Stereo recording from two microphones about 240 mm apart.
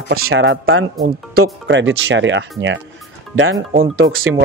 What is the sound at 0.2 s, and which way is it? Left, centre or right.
Speech, right.